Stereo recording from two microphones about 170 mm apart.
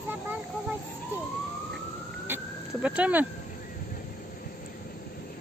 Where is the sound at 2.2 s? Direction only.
10° right (ahead or behind).